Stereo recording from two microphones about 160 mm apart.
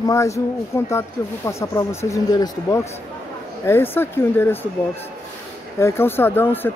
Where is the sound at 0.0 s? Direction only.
20° left (ahead or behind).